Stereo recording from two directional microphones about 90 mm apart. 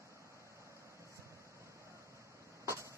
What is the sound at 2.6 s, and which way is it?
Vehicle, 30° right (ahead or behind).